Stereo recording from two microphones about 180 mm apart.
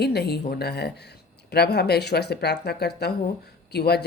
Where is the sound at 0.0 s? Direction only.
65° left (ahead or behind).